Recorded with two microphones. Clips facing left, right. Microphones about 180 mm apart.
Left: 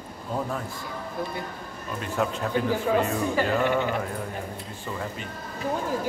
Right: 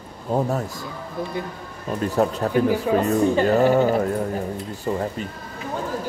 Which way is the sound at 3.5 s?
40° right (ahead or behind).